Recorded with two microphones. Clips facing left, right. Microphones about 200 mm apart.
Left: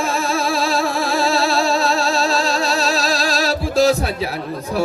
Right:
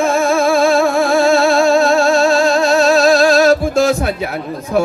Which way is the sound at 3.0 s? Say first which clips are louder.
Right 10 dB; 55° right (ahead or behind).